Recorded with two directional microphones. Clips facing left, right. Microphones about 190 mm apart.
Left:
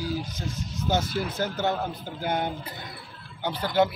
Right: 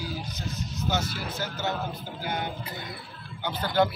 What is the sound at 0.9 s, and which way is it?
Speech, 55° left (ahead or behind).